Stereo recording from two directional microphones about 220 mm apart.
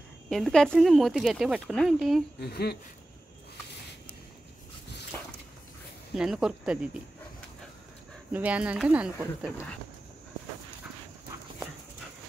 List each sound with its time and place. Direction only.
0.3 s speech: centre (ahead or behind)
2.4 s speech: 45° left (ahead or behind)
6.1 s speech: 5° right (ahead or behind)
8.3 s speech: 5° right (ahead or behind)